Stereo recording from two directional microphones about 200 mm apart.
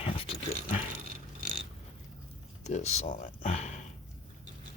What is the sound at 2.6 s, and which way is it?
Speech, 35° left (ahead or behind).